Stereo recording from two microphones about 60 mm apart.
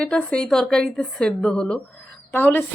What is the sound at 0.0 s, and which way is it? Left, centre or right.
Speech, centre.